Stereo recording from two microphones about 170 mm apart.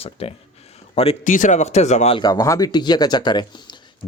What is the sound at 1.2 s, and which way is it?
Speech, 50° left (ahead or behind).